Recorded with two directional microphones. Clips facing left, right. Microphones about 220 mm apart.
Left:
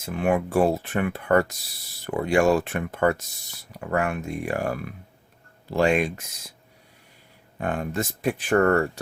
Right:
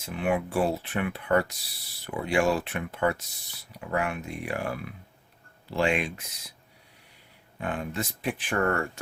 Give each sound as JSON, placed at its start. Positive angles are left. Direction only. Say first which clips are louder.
{"t": 0.0, "sound": "speech", "louder": "left 4 dB", "side_deg": 45}
{"t": 7.6, "sound": "speech", "louder": "left 4 dB", "side_deg": 45}